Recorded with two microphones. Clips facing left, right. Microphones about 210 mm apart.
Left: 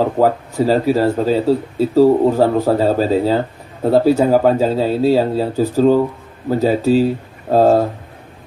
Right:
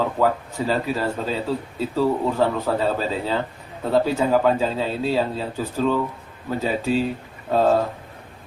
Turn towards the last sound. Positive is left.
turn(degrees=40)  # may be behind; listen again after turning